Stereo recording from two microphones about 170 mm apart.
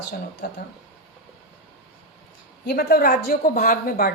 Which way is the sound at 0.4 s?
85° left.